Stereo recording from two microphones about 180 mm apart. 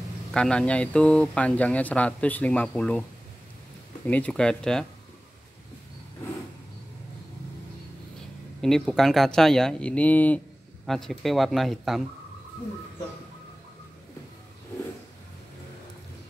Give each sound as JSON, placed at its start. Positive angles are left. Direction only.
{"t": 0.3, "sound": "speech", "side_deg": 5}
{"t": 4.1, "sound": "speech", "side_deg": 5}
{"t": 8.5, "sound": "speech", "side_deg": 5}